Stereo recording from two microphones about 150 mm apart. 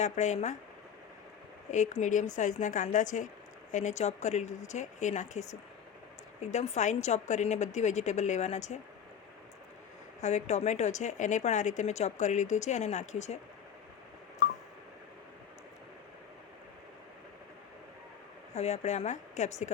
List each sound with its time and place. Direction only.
0.0 s a woman's voice: 50° left (ahead or behind)
1.7 s a woman's voice: 55° left (ahead or behind)
10.2 s a woman's voice: 50° left (ahead or behind)
18.5 s a woman's voice: 45° left (ahead or behind)